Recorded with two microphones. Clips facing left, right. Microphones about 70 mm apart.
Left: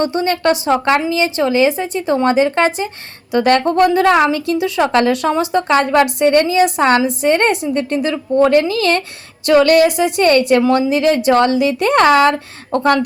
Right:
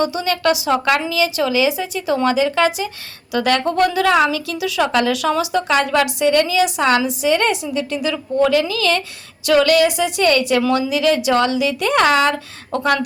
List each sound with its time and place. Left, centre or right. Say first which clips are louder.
0.0 s a woman's voice: left 3 dB; left